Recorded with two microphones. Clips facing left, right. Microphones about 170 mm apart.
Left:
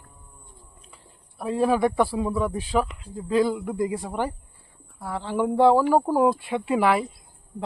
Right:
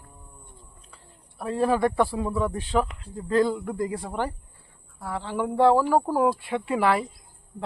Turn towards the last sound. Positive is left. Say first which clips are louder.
# left 2 dB
turn(degrees=15)  # may be behind; listen again after turning